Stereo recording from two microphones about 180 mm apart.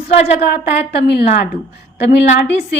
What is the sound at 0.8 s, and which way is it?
A woman's voice, 65° left (ahead or behind).